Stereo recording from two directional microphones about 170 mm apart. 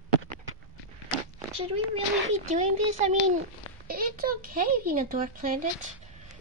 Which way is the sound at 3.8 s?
55° right (ahead or behind).